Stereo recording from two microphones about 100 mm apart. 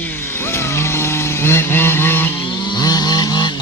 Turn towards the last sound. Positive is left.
turn(degrees=45)  # may be behind; listen again after turning